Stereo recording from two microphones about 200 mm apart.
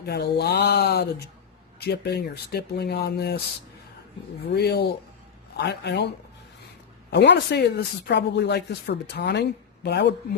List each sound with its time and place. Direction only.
0.0 s speech: 55° left (ahead or behind)
4.5 s speech: 55° left (ahead or behind)
7.1 s speech: 60° left (ahead or behind)